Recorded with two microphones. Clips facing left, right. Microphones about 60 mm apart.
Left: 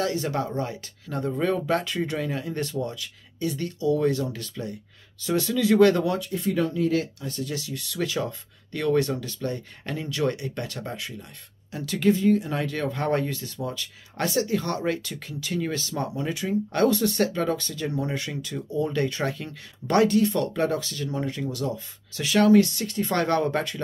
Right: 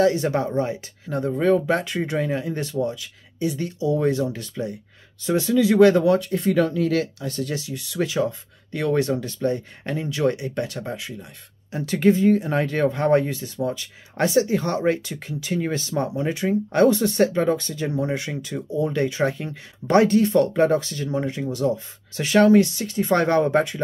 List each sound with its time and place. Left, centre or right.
0.0 s speech: right
6.1 s speech: right
6.5 s speech: right
7.5 s speech: centre
11.7 s speech: right
12.9 s speech: centre; by 22.6 s right
22.8 s speech: centre